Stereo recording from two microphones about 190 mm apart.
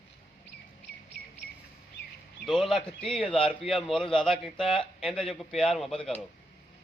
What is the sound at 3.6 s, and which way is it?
Speech, centre (ahead or behind).